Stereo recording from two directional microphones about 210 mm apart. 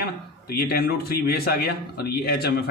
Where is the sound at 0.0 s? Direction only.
45° left (ahead or behind).